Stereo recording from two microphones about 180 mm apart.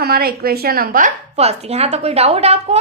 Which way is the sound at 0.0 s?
60° right (ahead or behind).